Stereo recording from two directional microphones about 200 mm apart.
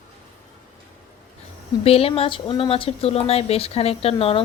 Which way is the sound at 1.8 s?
30° left (ahead or behind).